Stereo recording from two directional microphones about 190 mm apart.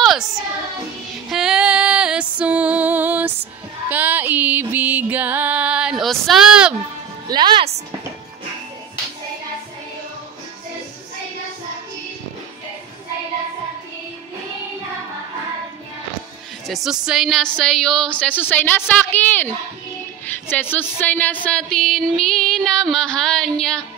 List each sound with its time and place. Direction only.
0.0 s child singing: centre (ahead or behind)
1.3 s music: 5° right (ahead or behind)
7.2 s music: 25° right (ahead or behind)
16.6 s a woman's voice: centre (ahead or behind)